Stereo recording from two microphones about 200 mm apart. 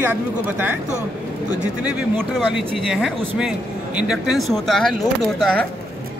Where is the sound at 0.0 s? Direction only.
10° right (ahead or behind).